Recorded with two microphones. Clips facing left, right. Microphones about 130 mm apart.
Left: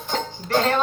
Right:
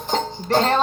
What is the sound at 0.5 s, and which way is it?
Music, 35° right (ahead or behind).